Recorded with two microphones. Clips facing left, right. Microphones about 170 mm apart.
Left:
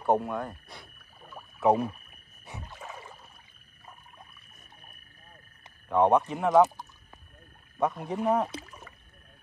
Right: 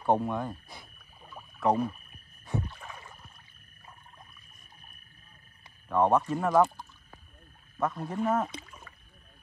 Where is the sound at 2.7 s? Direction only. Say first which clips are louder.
Left 2 dB; 20° left (ahead or behind).